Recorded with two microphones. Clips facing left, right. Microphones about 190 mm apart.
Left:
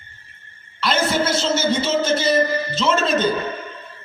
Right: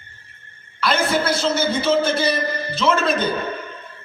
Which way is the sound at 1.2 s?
25° left (ahead or behind).